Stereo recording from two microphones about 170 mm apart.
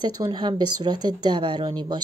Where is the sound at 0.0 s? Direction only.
25° right (ahead or behind).